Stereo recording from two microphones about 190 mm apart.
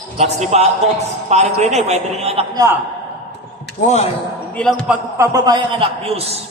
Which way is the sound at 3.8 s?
35° left (ahead or behind).